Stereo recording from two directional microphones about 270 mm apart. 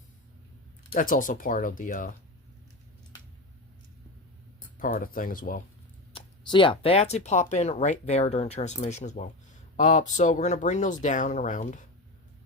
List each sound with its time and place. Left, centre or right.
0.9 s speech: left
4.8 s speech: left
6.1 s speech: centre